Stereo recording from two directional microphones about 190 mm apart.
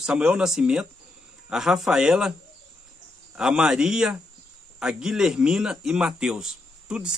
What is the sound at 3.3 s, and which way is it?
A man's voice, 5° right (ahead or behind).